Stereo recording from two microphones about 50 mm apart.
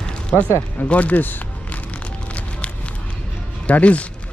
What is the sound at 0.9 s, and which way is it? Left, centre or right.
Speech, left.